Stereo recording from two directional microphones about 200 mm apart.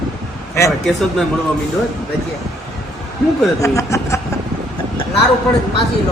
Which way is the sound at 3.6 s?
15° left (ahead or behind).